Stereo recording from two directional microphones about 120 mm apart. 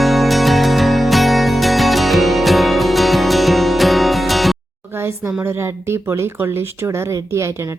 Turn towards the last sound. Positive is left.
turn(degrees=-20)  # may be behind; listen again after turning